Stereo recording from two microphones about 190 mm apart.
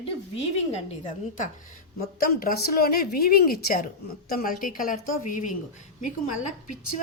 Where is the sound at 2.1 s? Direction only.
50° left (ahead or behind).